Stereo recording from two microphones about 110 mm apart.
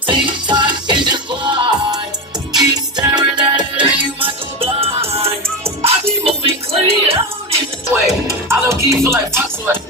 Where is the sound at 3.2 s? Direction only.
45° right (ahead or behind).